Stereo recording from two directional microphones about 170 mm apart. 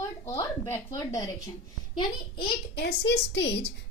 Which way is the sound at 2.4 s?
75° left (ahead or behind).